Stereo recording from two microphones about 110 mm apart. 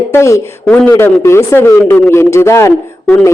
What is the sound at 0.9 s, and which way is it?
Speech, 25° left (ahead or behind).